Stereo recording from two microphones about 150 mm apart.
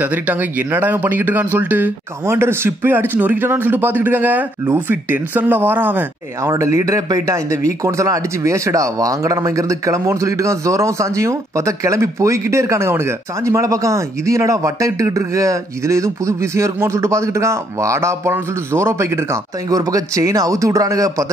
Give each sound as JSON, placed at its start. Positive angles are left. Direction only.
{"t": 0.0, "sound": "speech", "side_deg": -10}